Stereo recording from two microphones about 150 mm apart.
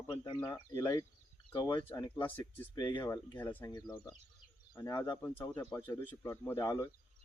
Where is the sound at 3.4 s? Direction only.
15° left (ahead or behind).